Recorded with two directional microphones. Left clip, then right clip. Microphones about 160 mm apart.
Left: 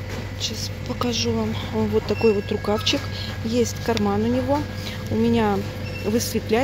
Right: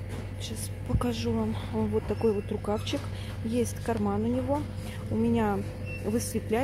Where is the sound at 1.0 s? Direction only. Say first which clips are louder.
Left 7 dB; 20° right (ahead or behind).